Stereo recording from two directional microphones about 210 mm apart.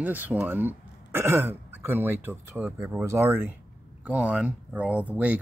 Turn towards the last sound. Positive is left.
turn(degrees=-5)  # may be behind; listen again after turning